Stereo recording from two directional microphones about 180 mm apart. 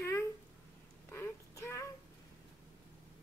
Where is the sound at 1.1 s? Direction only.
15° left (ahead or behind).